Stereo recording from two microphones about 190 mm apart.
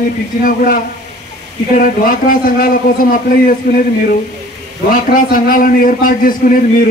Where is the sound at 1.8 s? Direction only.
45° left (ahead or behind).